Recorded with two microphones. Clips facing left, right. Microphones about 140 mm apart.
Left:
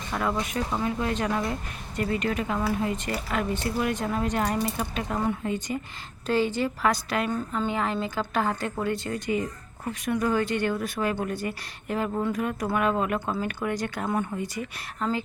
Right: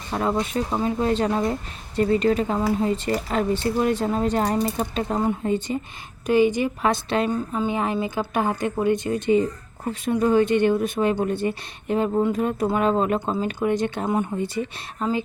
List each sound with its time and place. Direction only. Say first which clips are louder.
0.1 s a woman's voice: right 5 dB; 30° right (ahead or behind)
6.2 s a woman's voice: right 6 dB; 15° right (ahead or behind)